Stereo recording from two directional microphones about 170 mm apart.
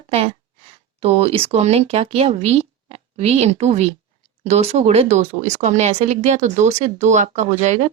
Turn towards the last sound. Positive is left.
turn(degrees=-45)  # may be behind; listen again after turning